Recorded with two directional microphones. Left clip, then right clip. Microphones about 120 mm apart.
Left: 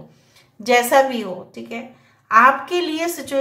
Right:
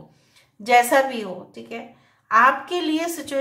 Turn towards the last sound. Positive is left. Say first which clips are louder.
# left 1 dB
turn(degrees=0)  # may be behind; listen again after turning